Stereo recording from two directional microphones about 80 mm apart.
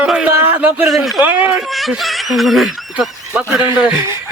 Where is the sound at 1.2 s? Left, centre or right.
Right.